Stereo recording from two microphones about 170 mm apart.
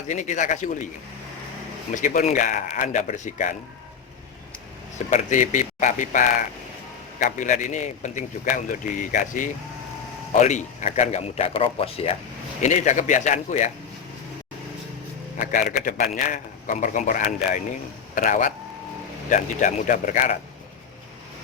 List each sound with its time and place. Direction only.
0.1 s a man's voice: 45° left (ahead or behind)
2.0 s a man's voice: 45° left (ahead or behind)
5.1 s a man's voice: 45° left (ahead or behind)
15.4 s a man's voice: 55° left (ahead or behind)